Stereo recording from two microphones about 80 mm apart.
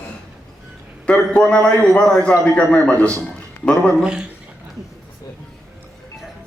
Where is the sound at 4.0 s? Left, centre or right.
Centre.